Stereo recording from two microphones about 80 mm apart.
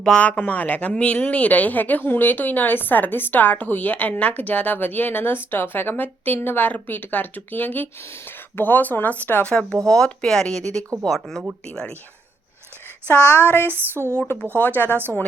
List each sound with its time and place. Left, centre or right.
0.0 s speech: centre
13.2 s speech: left
13.9 s speech: right
14.6 s speech: left